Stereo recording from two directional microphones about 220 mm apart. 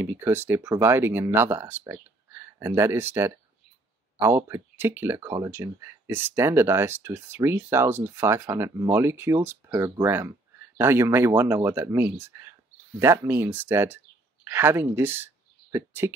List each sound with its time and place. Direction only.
0.0 s speech: 10° right (ahead or behind)